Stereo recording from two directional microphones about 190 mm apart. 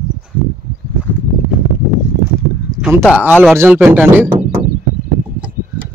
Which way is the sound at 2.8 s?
10° right (ahead or behind).